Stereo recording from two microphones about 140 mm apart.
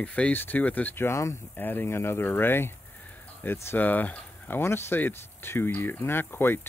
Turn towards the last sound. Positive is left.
turn(degrees=15)  # may be behind; listen again after turning